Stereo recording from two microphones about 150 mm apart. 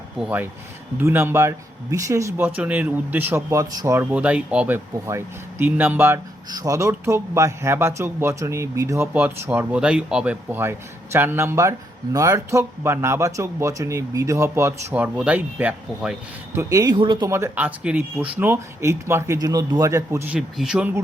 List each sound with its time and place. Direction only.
0.2 s speech: 10° right (ahead or behind)
4.1 s speech: 10° right (ahead or behind)
6.5 s speech: 25° right (ahead or behind); by 16.1 s 5° right (ahead or behind)
16.6 s speech: 20° right (ahead or behind)
17.3 s speech: 15° right (ahead or behind)